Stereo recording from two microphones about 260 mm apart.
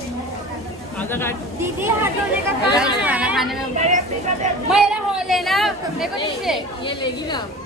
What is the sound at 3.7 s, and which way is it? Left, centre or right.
Speech, right.